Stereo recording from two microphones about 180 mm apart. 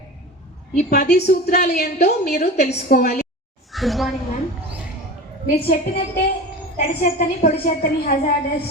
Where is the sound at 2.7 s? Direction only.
55° left (ahead or behind).